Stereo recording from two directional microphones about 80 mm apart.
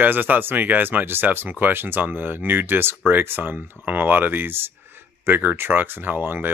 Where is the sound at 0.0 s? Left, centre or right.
Right.